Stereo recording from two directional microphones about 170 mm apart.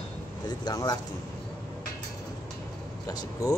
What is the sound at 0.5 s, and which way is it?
Speech, 25° left (ahead or behind).